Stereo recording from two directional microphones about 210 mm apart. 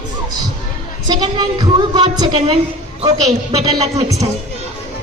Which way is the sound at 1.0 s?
20° right (ahead or behind).